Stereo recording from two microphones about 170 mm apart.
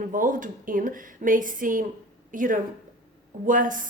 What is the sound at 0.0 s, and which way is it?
A woman's voice, 50° right (ahead or behind).